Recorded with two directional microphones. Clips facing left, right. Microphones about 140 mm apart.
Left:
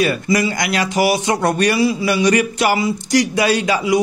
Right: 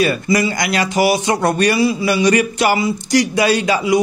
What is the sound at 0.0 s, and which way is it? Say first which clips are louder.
Speech: right 1 dB; 30° right (ahead or behind).